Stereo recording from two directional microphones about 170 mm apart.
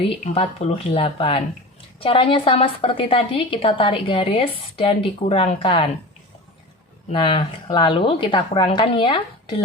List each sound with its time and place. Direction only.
0.0 s a woman's voice: 30° left (ahead or behind)
7.1 s a woman's voice: 30° left (ahead or behind)